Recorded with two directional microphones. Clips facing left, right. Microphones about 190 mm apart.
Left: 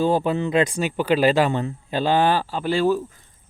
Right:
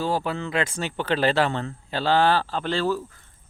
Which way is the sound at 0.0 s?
20° left (ahead or behind).